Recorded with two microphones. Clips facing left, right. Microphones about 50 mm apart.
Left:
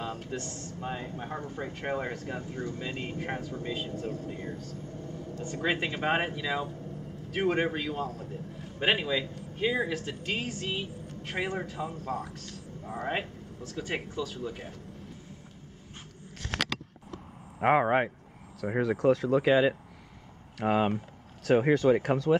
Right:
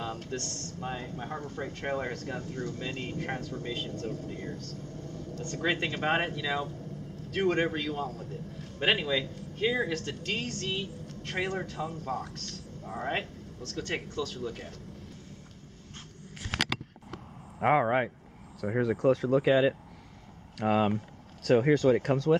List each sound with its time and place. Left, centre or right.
0.0 s a man's voice: centre
12.3 s speech: centre
16.5 s a sound: centre
17.6 s speech: centre
18.7 s speech: centre